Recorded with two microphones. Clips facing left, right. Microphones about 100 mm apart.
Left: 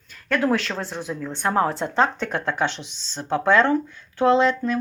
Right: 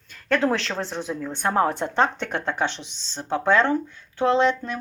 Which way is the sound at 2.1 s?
45° left (ahead or behind).